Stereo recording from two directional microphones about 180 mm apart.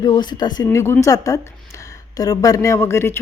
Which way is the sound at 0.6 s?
15° left (ahead or behind).